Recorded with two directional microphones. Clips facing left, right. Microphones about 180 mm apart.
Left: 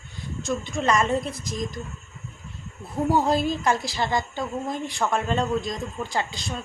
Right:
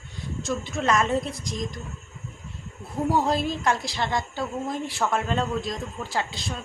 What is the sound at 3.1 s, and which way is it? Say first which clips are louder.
A woman's voice: left 2 dB; centre (ahead or behind).